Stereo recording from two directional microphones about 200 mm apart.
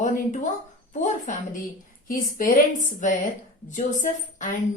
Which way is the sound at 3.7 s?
40° left (ahead or behind).